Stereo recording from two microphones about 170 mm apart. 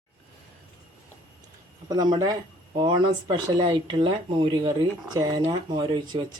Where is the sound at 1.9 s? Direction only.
25° right (ahead or behind).